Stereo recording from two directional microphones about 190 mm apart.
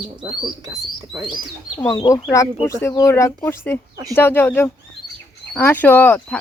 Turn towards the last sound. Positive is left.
turn(degrees=10)  # may be behind; listen again after turning